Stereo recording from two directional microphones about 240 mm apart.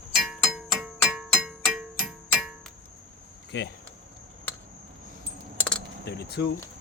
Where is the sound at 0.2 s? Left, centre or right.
Centre.